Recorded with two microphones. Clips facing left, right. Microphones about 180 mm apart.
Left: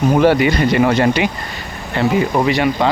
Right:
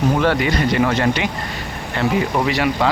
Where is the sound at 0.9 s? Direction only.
20° left (ahead or behind).